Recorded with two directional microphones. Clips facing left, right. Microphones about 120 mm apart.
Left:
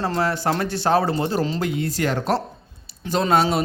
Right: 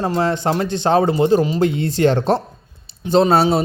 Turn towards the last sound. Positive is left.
turn(degrees=-30)  # may be behind; listen again after turning